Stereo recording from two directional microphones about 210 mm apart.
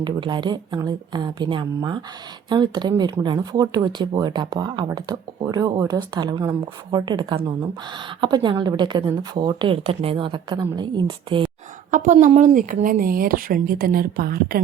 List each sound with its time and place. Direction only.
0.0 s speech: 20° right (ahead or behind)
11.9 s speech: 35° right (ahead or behind)